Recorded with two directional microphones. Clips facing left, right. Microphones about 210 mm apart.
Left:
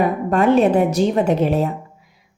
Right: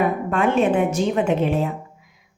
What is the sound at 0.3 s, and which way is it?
A woman's voice, 40° left (ahead or behind).